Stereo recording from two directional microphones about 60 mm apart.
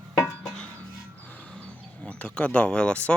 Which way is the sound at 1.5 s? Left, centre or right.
Centre.